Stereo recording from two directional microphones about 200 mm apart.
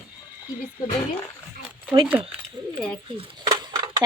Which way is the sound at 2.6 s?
20° right (ahead or behind).